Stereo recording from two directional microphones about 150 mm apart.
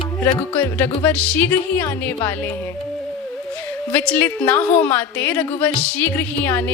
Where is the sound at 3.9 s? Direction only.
10° left (ahead or behind).